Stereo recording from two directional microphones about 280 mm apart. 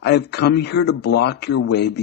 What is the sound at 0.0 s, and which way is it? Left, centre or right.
Speech, left.